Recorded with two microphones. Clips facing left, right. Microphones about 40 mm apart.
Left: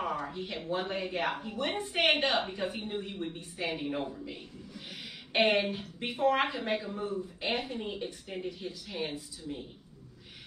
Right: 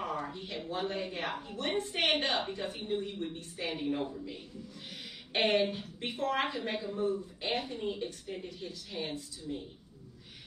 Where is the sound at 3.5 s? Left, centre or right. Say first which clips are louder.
Even; centre.